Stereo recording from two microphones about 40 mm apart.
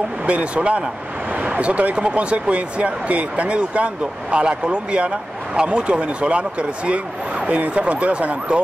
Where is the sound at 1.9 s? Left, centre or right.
Right.